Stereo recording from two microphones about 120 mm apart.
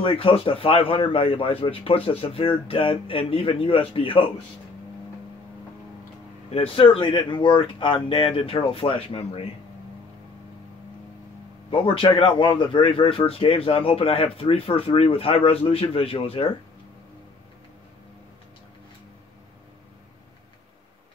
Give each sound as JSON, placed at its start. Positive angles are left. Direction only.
{"t": 0.0, "sound": "speech", "side_deg": 50}
{"t": 6.5, "sound": "speech", "side_deg": 50}
{"t": 11.7, "sound": "speech", "side_deg": 45}